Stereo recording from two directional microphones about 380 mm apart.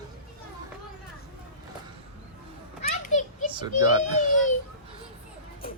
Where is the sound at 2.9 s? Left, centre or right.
Centre.